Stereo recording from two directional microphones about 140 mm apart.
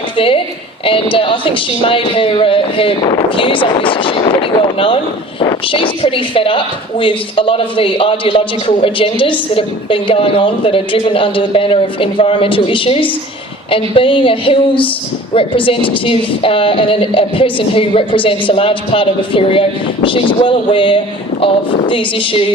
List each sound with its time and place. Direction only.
0.9 s a man's voice: 40° left (ahead or behind)